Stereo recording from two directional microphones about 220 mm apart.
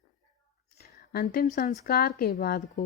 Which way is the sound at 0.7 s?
45° left (ahead or behind).